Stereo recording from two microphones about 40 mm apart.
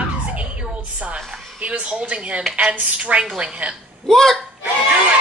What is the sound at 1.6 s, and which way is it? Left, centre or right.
A woman's voice, right.